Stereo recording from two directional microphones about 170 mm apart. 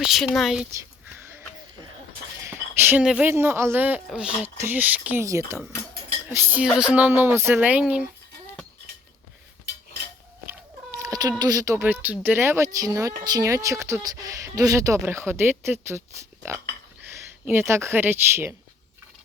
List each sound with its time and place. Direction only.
0.0 s speech: centre (ahead or behind)
0.7 s a sound: 15° right (ahead or behind)
2.4 s a woman's voice: 15° right (ahead or behind)
10.9 s speech: 20° right (ahead or behind)